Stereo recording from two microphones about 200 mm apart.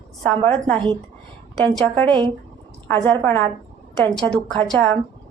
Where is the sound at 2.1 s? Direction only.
25° right (ahead or behind).